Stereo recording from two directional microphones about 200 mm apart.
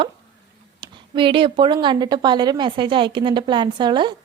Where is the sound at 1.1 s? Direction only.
25° right (ahead or behind).